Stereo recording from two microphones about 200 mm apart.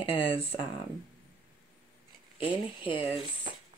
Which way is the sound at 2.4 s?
25° left (ahead or behind).